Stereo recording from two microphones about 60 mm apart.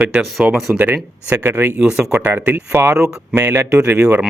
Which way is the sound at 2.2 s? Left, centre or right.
Right.